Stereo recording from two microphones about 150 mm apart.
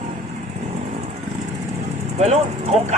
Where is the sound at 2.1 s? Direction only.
45° right (ahead or behind).